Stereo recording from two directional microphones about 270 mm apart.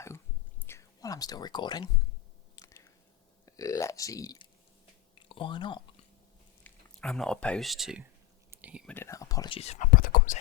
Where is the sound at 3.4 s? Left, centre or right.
Centre.